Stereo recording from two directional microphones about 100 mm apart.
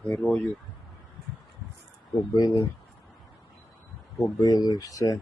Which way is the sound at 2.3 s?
40° left (ahead or behind).